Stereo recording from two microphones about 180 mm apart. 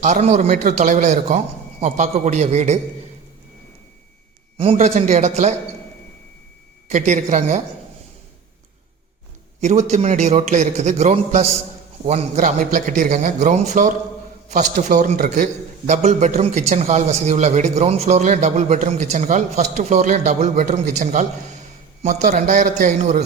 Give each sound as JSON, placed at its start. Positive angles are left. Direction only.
{"t": 0.0, "sound": "a man's voice", "side_deg": -40}
{"t": 4.5, "sound": "a man's voice", "side_deg": -30}
{"t": 6.8, "sound": "a man's voice", "side_deg": -40}
{"t": 9.6, "sound": "a man's voice", "side_deg": -40}